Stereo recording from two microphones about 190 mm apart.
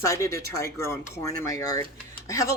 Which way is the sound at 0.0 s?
15° left (ahead or behind).